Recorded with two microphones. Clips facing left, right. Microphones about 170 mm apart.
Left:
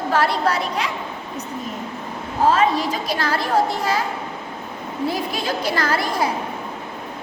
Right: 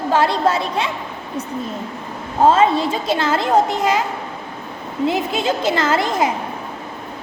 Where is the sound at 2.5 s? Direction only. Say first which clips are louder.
Right 3 dB; 25° right (ahead or behind).